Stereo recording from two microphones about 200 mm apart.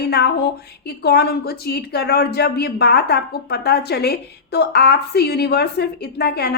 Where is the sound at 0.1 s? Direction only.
55° left (ahead or behind).